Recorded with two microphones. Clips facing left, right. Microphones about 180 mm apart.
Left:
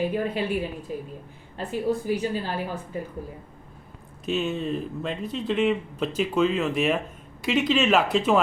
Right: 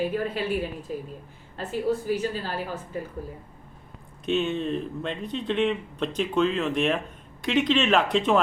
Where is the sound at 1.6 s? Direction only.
15° left (ahead or behind).